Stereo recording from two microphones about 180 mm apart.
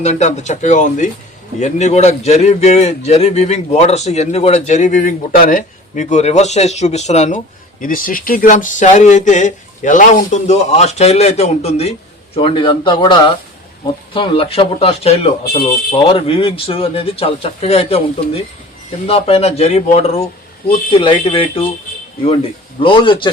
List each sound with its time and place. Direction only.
0.0 s speech: 40° left (ahead or behind)
22.8 s speech: 30° left (ahead or behind)